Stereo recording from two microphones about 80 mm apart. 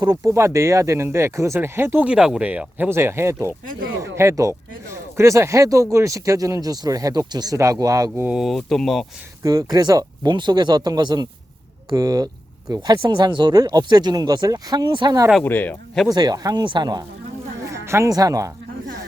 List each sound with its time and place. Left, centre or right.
0.3 s speech: right
2.0 s speech: centre
2.4 s speech: centre
2.9 s speech: right
8.3 s speech: centre
9.4 s speech: right
10.3 s speech: right
13.0 s speech: right
15.4 s speech: left
16.0 s speech: right
16.6 s speech: right
17.6 s a sound: right
18.1 s speech: right